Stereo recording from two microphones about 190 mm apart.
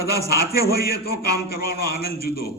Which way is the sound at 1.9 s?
55° left (ahead or behind).